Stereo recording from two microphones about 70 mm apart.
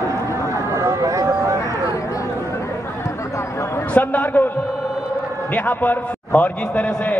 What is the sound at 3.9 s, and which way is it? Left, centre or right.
Speech, left.